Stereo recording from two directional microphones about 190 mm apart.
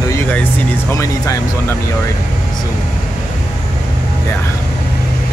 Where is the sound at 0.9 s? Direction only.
15° left (ahead or behind).